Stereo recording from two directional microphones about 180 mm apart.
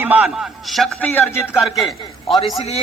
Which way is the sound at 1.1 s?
10° left (ahead or behind).